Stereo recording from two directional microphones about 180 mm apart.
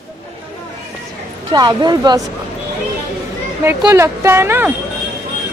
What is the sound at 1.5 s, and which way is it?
Speech, 25° right (ahead or behind).